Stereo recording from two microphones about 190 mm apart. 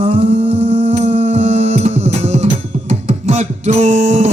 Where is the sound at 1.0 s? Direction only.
30° right (ahead or behind).